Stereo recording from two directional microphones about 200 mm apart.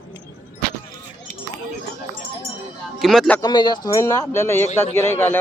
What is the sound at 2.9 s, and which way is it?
Speech, centre (ahead or behind).